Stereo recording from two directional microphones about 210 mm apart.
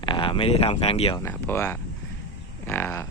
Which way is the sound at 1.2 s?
10° left (ahead or behind).